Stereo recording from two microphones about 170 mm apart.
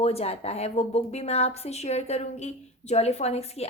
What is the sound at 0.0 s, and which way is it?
A woman's voice, 35° left (ahead or behind).